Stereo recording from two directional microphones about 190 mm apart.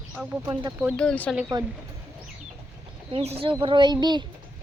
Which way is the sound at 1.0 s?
5° left (ahead or behind).